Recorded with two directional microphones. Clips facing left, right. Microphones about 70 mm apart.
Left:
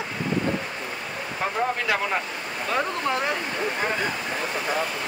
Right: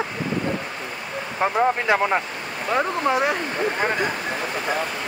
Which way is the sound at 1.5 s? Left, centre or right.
Right.